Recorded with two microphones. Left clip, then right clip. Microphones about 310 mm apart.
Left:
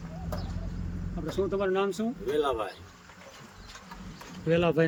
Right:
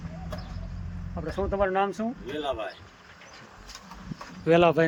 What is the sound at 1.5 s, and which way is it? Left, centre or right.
Speech, centre.